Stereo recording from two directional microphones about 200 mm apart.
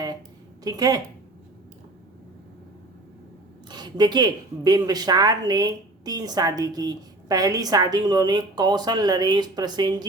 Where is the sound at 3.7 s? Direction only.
20° right (ahead or behind).